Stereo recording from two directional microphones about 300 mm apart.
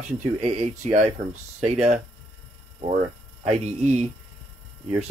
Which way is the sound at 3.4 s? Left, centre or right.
Right.